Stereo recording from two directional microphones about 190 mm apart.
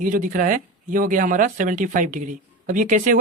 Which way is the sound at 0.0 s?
45° right (ahead or behind).